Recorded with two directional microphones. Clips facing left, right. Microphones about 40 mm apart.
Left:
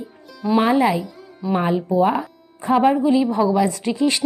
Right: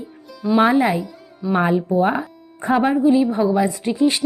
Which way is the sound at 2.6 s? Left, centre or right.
Right.